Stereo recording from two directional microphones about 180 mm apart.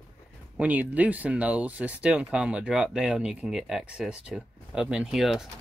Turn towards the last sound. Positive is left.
turn(degrees=0)  # may be behind; listen again after turning